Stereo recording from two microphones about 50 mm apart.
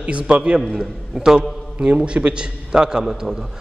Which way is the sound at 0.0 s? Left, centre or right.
Right.